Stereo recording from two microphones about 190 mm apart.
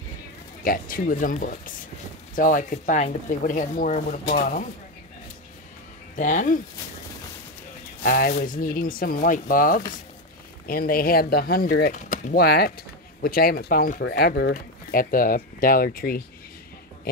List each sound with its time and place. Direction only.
0.7 s speech: 50° left (ahead or behind)
6.1 s speech: 40° left (ahead or behind)
8.0 s speech: 45° left (ahead or behind)
14.5 s speech: 45° left (ahead or behind)